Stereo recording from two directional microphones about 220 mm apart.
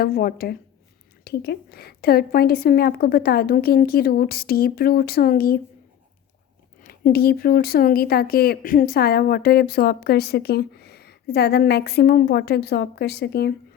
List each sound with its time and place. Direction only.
0.0 s speech: 45° left (ahead or behind)
6.8 s speech: 45° left (ahead or behind)